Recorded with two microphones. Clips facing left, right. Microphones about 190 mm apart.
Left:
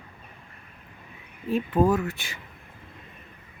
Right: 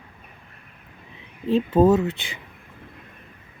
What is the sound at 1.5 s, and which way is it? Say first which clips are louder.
Speech: right 5 dB; 25° right (ahead or behind).